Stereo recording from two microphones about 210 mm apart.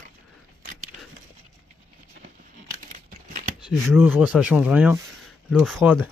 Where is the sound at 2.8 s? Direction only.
40° right (ahead or behind).